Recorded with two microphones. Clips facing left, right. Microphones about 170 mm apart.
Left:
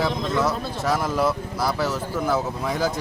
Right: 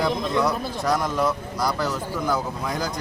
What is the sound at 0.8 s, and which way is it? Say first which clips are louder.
Speech: left 1 dB; 5° left (ahead or behind).